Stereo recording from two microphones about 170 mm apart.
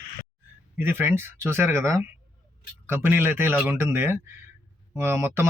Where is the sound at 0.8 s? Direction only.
15° right (ahead or behind).